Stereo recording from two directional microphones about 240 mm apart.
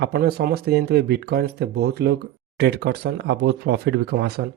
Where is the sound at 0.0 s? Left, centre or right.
Right.